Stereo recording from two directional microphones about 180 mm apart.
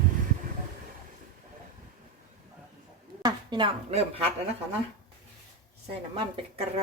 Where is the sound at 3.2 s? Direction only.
25° right (ahead or behind).